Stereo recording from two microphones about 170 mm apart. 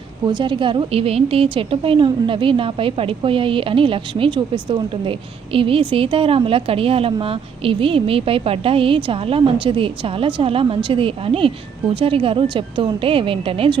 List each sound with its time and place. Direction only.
0.3 s a woman's voice: 30° right (ahead or behind)